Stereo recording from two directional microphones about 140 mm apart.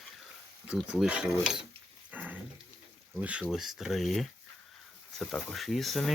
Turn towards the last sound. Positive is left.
turn(degrees=0)  # may be behind; listen again after turning